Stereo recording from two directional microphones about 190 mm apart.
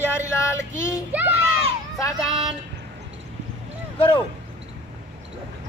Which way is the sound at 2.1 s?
Centre (ahead or behind).